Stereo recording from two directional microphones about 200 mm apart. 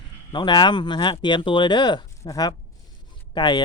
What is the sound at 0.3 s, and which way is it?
Speech, 25° left (ahead or behind).